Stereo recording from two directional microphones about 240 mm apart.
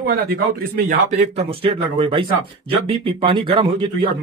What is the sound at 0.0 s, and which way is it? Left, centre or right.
A man's voice, right.